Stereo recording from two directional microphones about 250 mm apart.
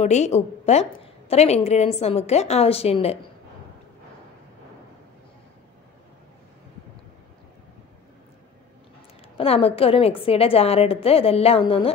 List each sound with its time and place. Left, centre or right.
0.0 s a woman's voice: left
9.4 s a woman's voice: left